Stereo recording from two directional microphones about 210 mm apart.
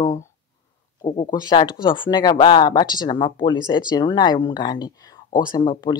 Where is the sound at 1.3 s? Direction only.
20° left (ahead or behind).